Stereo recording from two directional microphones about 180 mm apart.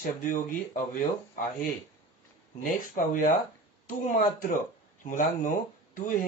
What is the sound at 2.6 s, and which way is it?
Speech, 45° left (ahead or behind).